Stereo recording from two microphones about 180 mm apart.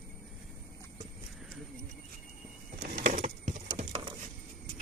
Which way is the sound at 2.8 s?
50° right (ahead or behind).